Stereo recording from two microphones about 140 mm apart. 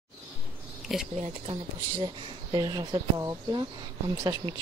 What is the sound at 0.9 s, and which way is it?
Speech, centre (ahead or behind).